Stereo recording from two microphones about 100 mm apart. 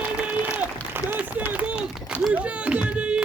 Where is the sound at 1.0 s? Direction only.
15° right (ahead or behind).